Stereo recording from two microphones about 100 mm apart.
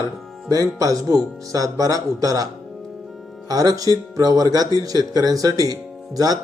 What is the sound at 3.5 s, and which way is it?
A man's voice, 40° right (ahead or behind).